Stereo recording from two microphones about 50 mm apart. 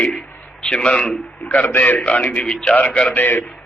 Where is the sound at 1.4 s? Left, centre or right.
Left.